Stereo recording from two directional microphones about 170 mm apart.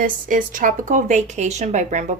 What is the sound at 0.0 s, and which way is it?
Speech, 50° right (ahead or behind).